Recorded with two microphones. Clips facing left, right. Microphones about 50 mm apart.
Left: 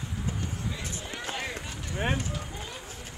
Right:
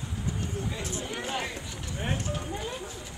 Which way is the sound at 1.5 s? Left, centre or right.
Left.